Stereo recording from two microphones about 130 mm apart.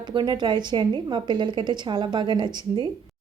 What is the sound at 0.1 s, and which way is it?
A woman's voice, 35° right (ahead or behind).